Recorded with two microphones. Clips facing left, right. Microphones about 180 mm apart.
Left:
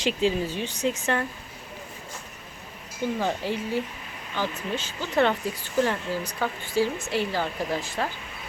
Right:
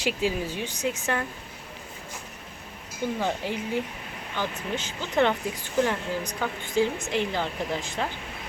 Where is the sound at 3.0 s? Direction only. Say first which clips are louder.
Left 1 dB; 15° right (ahead or behind).